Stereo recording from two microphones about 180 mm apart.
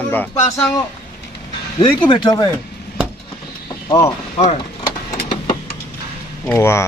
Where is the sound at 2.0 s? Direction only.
25° left (ahead or behind).